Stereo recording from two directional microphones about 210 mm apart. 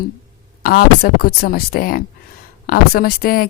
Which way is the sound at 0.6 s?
45° left (ahead or behind).